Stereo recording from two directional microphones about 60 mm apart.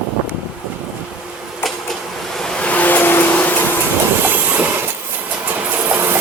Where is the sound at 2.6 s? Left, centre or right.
Left.